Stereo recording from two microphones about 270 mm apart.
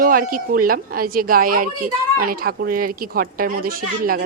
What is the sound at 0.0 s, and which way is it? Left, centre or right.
Speech, right.